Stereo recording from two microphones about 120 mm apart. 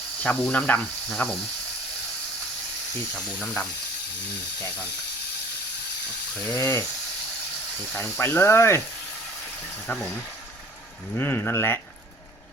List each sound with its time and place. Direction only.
0.2 s speech: 10° left (ahead or behind)
3.2 s speech: 10° left (ahead or behind)
6.5 s speech: 25° left (ahead or behind)
7.9 s speech: 20° left (ahead or behind)
11.1 s speech: 20° left (ahead or behind)